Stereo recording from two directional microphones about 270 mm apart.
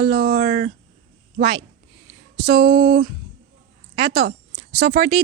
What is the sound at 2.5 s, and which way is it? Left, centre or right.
Speech, right.